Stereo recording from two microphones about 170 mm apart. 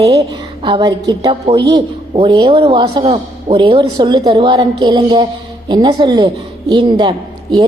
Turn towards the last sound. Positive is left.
turn(degrees=-25)  # may be behind; listen again after turning